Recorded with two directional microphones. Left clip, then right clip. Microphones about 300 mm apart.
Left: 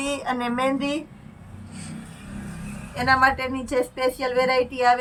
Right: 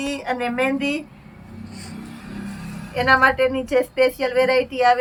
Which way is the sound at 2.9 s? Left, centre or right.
Centre.